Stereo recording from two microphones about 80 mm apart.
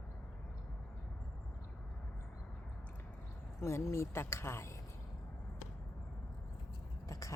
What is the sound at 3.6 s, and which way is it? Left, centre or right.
Speech, left.